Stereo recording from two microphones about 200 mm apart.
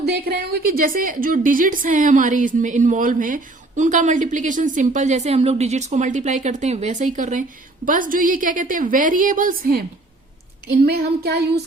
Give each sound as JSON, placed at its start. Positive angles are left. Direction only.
{"t": 0.0, "sound": "a woman's voice", "side_deg": -55}
{"t": 10.8, "sound": "a woman's voice", "side_deg": -55}